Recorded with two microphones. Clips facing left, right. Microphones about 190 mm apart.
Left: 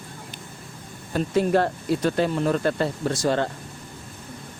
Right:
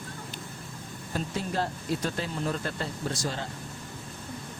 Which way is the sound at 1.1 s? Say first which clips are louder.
Left 10 dB; 65° left (ahead or behind).